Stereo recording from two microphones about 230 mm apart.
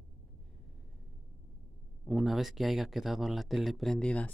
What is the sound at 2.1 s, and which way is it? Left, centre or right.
Speech, centre.